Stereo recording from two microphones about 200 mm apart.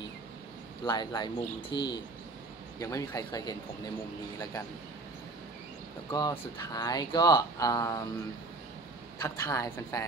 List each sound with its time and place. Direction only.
0.8 s speech: 20° left (ahead or behind)
6.1 s speech: 20° left (ahead or behind)
9.2 s speech: 15° left (ahead or behind)